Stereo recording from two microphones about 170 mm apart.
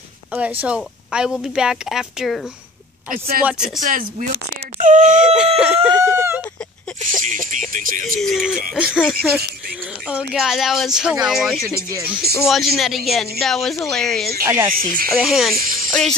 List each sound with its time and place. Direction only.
0.3 s speech: 10° right (ahead or behind)
3.1 s speech: 60° right (ahead or behind)
3.4 s speech: 5° right (ahead or behind)
3.8 s speech: 50° right (ahead or behind)
5.2 s chicken: 5° right (ahead or behind)
7.7 s speech: 50° right (ahead or behind)
8.2 s speech: centre (ahead or behind)
11.9 s speech: 10° right (ahead or behind)
12.4 s speech: centre (ahead or behind)
14.7 s speech: 55° right (ahead or behind)
15.0 s speech: centre (ahead or behind)
15.5 s snake: 55° right (ahead or behind)
15.9 s speech: 5° left (ahead or behind)